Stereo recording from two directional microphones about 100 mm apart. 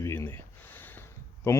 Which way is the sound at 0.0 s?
25° left (ahead or behind).